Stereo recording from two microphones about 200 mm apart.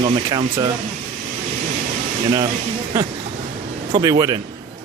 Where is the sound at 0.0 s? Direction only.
20° right (ahead or behind).